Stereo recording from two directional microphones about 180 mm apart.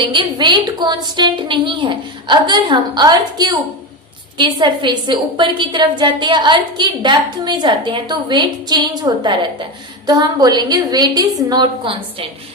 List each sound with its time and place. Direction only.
0.1 s a woman's voice: 25° right (ahead or behind)